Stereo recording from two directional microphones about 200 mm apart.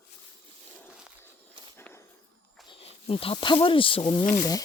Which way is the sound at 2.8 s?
30° left (ahead or behind).